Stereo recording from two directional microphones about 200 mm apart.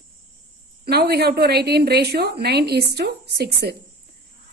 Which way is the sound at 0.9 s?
55° right (ahead or behind).